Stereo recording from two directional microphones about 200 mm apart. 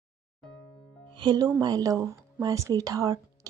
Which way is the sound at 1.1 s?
20° right (ahead or behind).